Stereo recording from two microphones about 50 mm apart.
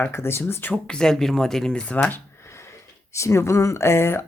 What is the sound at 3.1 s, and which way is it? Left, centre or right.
Speech, left.